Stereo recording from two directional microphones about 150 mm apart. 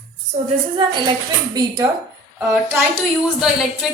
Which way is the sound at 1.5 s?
25° right (ahead or behind).